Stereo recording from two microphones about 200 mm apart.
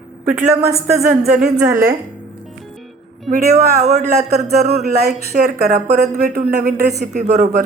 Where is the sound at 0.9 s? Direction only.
35° right (ahead or behind).